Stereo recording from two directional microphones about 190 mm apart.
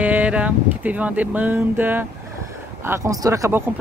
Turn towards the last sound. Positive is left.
turn(degrees=-15)  # may be behind; listen again after turning